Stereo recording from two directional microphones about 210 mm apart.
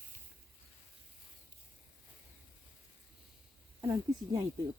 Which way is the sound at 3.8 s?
15° right (ahead or behind).